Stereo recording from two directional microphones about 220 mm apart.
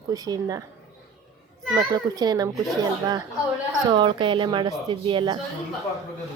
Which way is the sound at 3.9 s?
20° right (ahead or behind).